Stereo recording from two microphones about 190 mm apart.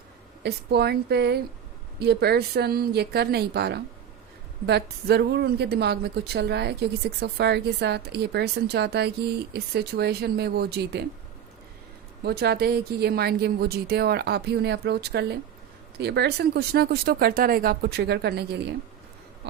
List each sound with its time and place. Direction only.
0.4 s speech: 60° right (ahead or behind)
12.2 s speech: 55° right (ahead or behind)